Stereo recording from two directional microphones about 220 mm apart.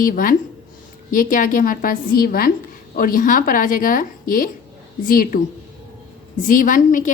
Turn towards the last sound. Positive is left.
turn(degrees=35)  # may be behind; listen again after turning